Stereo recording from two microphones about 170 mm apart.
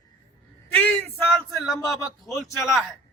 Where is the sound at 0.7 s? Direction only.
10° left (ahead or behind).